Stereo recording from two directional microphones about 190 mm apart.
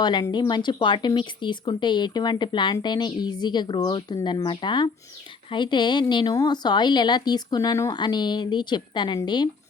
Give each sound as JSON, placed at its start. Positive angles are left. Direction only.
{"t": 0.0, "sound": "speech", "side_deg": 20}